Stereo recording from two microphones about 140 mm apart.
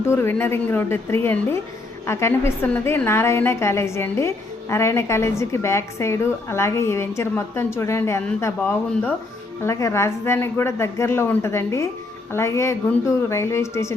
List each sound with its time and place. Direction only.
0.1 s a woman's voice: 15° left (ahead or behind)